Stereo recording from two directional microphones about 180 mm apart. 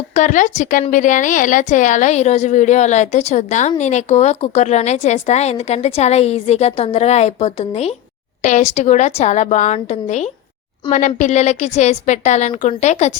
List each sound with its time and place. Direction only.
0.1 s speech: 45° left (ahead or behind)